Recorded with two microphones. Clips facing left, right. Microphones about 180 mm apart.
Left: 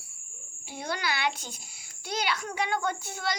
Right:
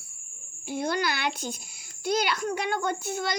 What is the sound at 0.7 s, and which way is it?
A child's voice, 45° right (ahead or behind).